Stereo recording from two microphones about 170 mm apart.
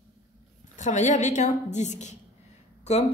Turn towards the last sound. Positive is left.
turn(degrees=40)  # may be behind; listen again after turning